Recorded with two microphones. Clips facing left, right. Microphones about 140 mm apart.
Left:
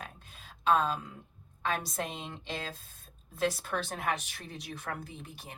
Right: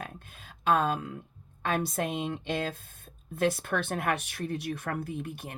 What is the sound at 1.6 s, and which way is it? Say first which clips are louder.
Speech: right 4 dB; 55° right (ahead or behind).